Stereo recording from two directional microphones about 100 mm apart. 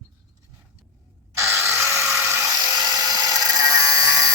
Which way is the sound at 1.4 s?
25° right (ahead or behind).